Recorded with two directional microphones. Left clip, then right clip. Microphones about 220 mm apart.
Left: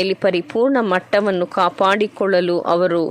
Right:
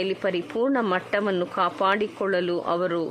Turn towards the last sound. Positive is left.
turn(degrees=20)  # may be behind; listen again after turning